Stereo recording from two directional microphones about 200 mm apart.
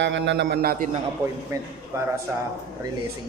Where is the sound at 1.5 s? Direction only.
15° right (ahead or behind).